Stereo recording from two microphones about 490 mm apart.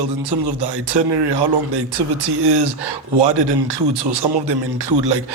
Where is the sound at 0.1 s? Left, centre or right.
Right.